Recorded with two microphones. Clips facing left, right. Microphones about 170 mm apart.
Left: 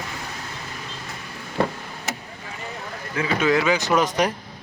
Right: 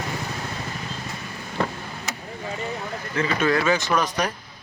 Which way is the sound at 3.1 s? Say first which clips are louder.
Left 1 dB; 10° left (ahead or behind).